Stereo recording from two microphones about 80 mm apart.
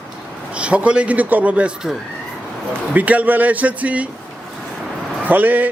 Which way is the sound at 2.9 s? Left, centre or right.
Centre.